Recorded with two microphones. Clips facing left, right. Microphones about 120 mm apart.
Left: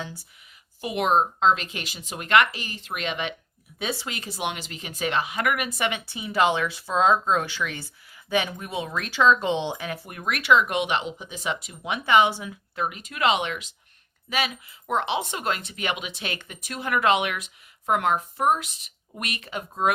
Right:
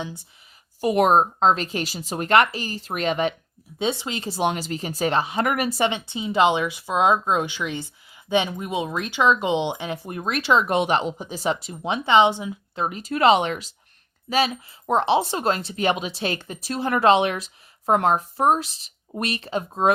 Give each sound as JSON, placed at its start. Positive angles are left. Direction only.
{"t": 0.8, "sound": "speech", "side_deg": -40}
{"t": 3.8, "sound": "speech", "side_deg": -25}